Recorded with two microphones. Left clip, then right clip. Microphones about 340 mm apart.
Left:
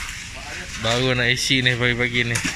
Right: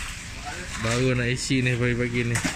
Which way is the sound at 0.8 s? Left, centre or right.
Centre.